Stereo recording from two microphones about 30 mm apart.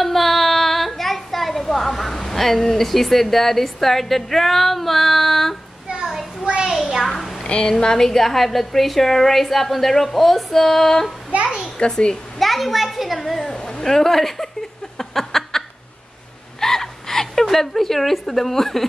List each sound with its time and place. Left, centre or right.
0.0 s child singing: centre
5.9 s a sound: right
6.7 s a sound: centre
7.4 s speech: left
8.0 s a woman's voice: centre
11.8 s a child's voice: left
12.4 s a child's voice: centre
13.7 s a woman's voice: centre
15.0 s a sound: centre
16.5 s a woman's voice: centre